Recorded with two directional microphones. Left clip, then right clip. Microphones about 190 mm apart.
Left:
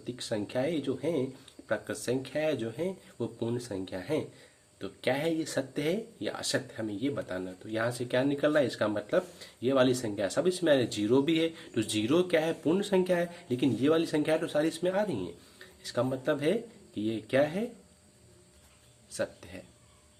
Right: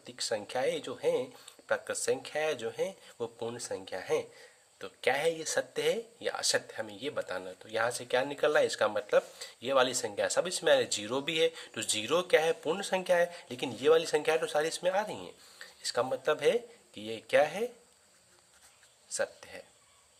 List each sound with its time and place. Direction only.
0.0 s speech: 25° right (ahead or behind)
19.1 s speech: 25° right (ahead or behind)